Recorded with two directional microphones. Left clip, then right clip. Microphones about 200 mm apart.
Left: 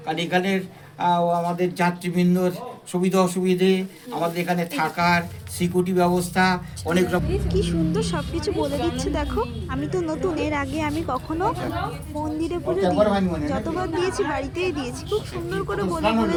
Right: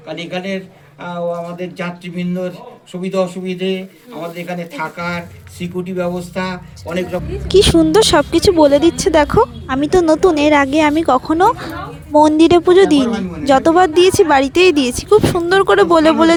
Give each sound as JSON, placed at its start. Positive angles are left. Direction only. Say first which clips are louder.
{"t": 0.1, "sound": "speech", "louder": "even", "side_deg": 30}
{"t": 7.4, "sound": "speech", "louder": "right 14 dB", "side_deg": -50}
{"t": 12.2, "sound": "speech", "louder": "right 16 dB", "side_deg": -50}